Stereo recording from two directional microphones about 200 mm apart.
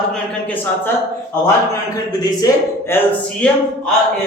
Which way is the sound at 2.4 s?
15° left (ahead or behind).